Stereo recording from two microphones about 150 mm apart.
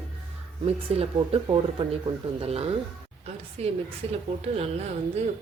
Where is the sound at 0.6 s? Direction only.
40° right (ahead or behind).